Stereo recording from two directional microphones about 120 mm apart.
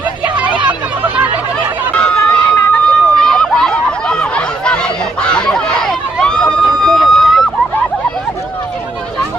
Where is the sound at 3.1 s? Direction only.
5° left (ahead or behind).